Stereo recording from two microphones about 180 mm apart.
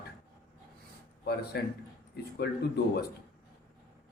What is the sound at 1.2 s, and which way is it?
A man's voice, 65° left (ahead or behind).